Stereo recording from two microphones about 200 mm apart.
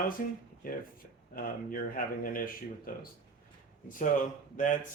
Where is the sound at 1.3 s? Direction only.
45° left (ahead or behind).